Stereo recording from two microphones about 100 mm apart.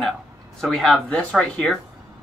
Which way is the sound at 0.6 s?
Centre (ahead or behind).